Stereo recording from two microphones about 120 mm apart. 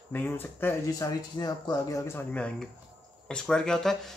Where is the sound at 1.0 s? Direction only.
35° left (ahead or behind).